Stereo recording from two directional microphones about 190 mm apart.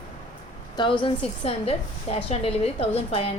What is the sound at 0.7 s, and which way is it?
A woman's voice, 25° left (ahead or behind).